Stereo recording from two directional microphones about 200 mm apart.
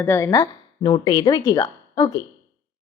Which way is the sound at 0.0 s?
15° left (ahead or behind).